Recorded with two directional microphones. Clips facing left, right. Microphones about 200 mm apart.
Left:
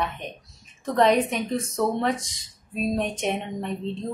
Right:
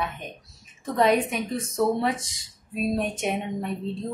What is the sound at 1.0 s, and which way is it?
A woman's voice, centre (ahead or behind).